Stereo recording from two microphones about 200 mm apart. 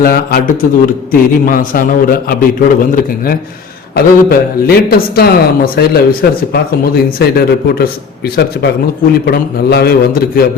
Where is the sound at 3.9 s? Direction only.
50° left (ahead or behind).